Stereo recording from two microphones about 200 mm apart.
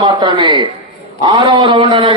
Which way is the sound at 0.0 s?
25° right (ahead or behind).